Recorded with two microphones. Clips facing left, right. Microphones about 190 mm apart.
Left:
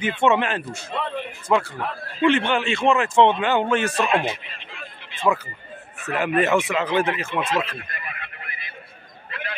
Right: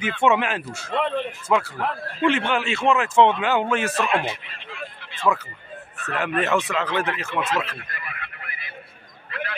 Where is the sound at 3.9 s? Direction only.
20° left (ahead or behind).